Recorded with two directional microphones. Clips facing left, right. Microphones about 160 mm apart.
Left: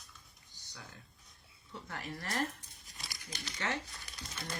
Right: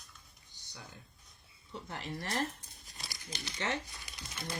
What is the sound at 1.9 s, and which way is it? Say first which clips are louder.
Speech: right 2 dB; 20° right (ahead or behind).